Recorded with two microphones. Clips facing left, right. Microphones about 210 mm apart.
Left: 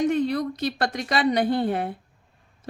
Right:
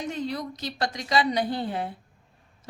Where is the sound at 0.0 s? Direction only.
60° left (ahead or behind).